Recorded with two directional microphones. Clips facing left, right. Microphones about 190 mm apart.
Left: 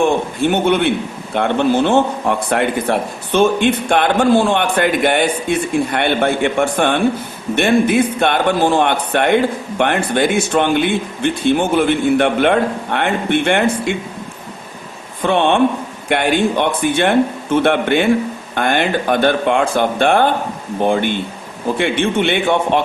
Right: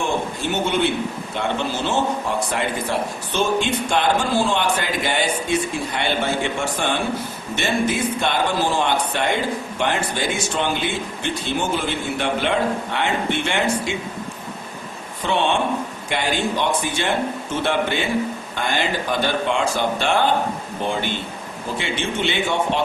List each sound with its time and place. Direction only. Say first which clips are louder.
0.0 s a man's voice: left 8 dB; 60° left (ahead or behind)
15.2 s a man's voice: left 7 dB; 55° left (ahead or behind)